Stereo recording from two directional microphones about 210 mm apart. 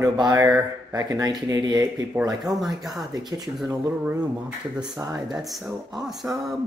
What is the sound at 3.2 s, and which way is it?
Speech, 20° right (ahead or behind).